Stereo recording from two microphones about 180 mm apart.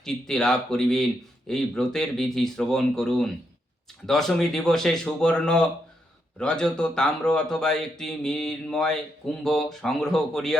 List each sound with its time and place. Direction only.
0.0 s speech: 5° left (ahead or behind)